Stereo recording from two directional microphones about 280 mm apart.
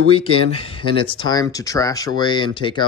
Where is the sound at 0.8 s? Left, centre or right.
Centre.